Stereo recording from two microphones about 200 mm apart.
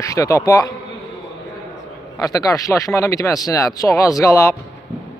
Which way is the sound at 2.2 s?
15° left (ahead or behind).